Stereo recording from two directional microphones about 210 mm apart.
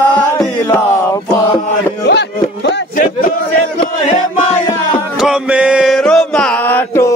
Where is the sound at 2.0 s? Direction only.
50° left (ahead or behind).